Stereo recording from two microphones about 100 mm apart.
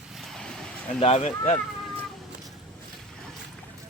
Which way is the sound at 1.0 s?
85° left.